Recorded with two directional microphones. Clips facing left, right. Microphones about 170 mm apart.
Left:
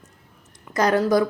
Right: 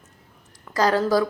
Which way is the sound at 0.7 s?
20° left (ahead or behind).